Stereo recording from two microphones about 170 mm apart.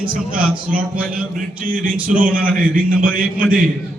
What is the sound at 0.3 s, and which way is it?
A man's voice, 55° right (ahead or behind).